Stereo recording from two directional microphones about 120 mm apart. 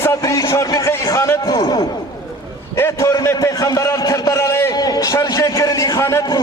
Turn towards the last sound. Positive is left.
turn(degrees=30)  # may be behind; listen again after turning